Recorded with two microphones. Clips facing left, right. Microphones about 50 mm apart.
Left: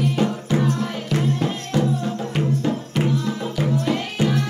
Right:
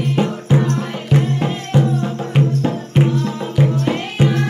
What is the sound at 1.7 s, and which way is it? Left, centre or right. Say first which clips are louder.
Music: right 4 dB; right.